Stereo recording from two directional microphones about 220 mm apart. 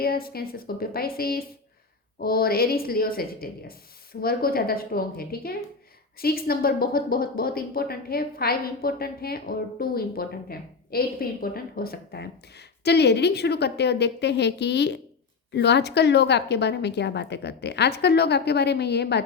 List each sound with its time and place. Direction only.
0.0 s speech: 45° left (ahead or behind)